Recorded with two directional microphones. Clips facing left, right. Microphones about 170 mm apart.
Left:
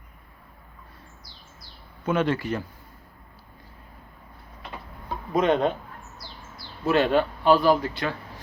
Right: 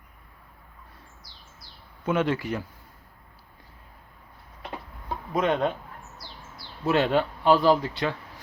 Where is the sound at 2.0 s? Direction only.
15° right (ahead or behind).